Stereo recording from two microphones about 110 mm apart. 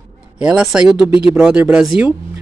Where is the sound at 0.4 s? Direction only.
5° right (ahead or behind).